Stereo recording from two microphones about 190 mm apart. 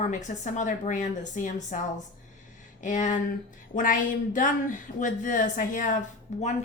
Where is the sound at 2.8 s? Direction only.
40° left (ahead or behind).